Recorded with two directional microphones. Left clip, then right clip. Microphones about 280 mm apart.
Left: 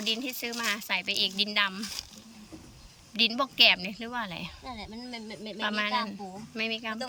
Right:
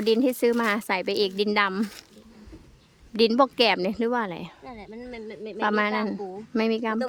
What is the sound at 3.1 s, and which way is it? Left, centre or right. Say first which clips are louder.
Speech: right 4 dB; centre.